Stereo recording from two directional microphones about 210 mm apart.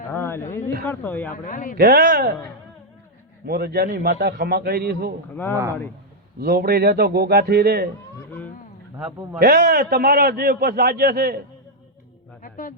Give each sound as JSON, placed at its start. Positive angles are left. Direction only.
{"t": 0.1, "sound": "a sound", "side_deg": 10}
{"t": 0.9, "sound": "speech", "side_deg": 10}
{"t": 1.3, "sound": "a man's voice", "side_deg": 40}
{"t": 1.8, "sound": "a man's voice", "side_deg": -50}
{"t": 3.4, "sound": "a man's voice", "side_deg": -45}
{"t": 6.4, "sound": "a man's voice", "side_deg": -50}
{"t": 9.0, "sound": "a man's voice", "side_deg": -5}
{"t": 9.4, "sound": "a man's voice", "side_deg": -50}
{"t": 12.4, "sound": "a sound", "side_deg": 40}